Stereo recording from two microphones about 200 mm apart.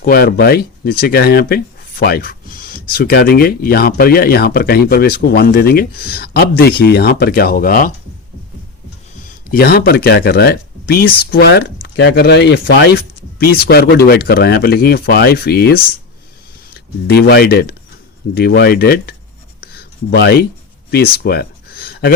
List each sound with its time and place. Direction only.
0.0 s speech: 50° left (ahead or behind)
9.5 s speech: 50° left (ahead or behind)
19.7 s a sound: 55° left (ahead or behind)